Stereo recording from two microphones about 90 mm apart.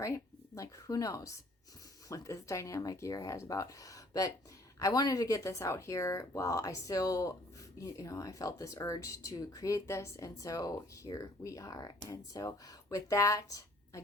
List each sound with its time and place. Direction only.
0.0 s speech: 35° left (ahead or behind)